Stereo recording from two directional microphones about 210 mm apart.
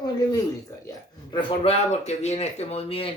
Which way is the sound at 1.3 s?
25° left (ahead or behind).